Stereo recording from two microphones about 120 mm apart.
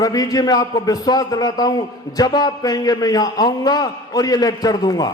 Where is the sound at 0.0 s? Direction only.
30° left (ahead or behind).